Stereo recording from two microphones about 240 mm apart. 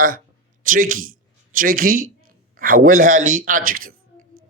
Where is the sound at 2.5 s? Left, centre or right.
Right.